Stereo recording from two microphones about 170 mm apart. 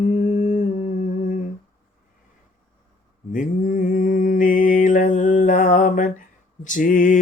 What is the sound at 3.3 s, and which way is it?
Mantra, 50° left (ahead or behind).